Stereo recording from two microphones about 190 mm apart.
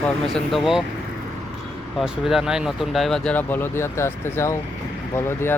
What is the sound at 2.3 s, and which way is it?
Speech, centre (ahead or behind).